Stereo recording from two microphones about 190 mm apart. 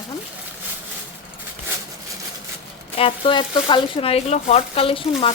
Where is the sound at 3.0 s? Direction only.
30° left (ahead or behind).